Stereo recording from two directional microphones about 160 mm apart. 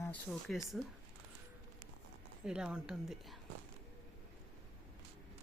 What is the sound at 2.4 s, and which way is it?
Speech, 5° right (ahead or behind).